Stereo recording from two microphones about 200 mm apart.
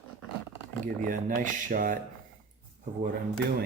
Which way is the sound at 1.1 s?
40° right (ahead or behind).